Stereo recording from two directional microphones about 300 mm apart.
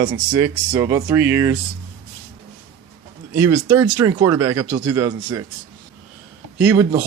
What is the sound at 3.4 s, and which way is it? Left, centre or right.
Speech, centre.